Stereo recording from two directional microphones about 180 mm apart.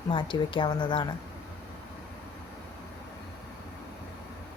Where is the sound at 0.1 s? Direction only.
25° left (ahead or behind).